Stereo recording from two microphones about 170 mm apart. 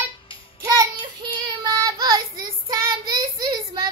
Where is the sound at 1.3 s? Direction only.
25° right (ahead or behind).